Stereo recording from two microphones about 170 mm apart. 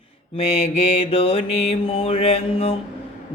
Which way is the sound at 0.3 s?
40° left (ahead or behind).